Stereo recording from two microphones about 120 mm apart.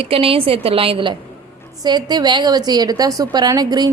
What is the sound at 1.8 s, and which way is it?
Speech, 35° right (ahead or behind).